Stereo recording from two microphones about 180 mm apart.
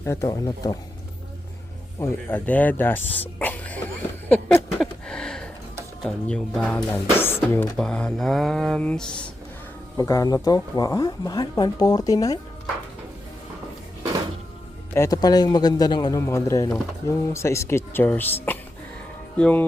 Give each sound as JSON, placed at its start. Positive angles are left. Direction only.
{"t": 0.0, "sound": "speech", "side_deg": 15}
{"t": 2.0, "sound": "speech", "side_deg": 10}
{"t": 4.8, "sound": "a sound", "side_deg": 5}
{"t": 6.0, "sound": "speech", "side_deg": 5}
{"t": 10.0, "sound": "speech", "side_deg": 20}
{"t": 14.9, "sound": "speech", "side_deg": 15}
{"t": 19.4, "sound": "speech", "side_deg": 10}